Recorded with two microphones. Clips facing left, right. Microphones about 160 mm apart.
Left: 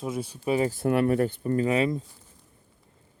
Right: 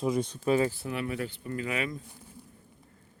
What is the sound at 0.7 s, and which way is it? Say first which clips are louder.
Speech: left 11 dB; 50° left (ahead or behind).